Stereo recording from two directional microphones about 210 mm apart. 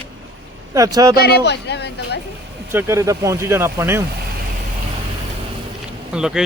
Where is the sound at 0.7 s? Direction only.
15° right (ahead or behind).